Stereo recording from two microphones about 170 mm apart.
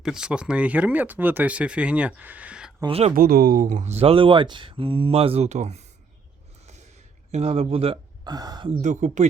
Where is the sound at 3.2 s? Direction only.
60° right (ahead or behind); by 5.7 s 40° right (ahead or behind).